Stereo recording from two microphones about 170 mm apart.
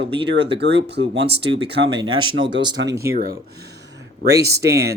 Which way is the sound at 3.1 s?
60° right (ahead or behind).